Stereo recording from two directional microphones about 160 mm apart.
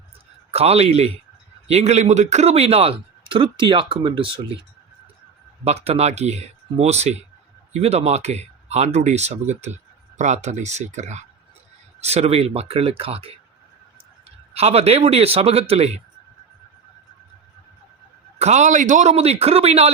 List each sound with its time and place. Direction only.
0.5 s a man's voice: 40° right (ahead or behind)
5.6 s a man's voice: 40° right (ahead or behind)
14.5 s a man's voice: 40° right (ahead or behind)
18.3 s a man's voice: 45° right (ahead or behind)